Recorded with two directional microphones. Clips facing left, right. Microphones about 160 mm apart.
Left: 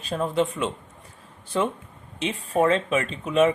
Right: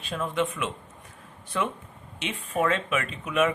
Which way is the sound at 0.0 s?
35° left (ahead or behind).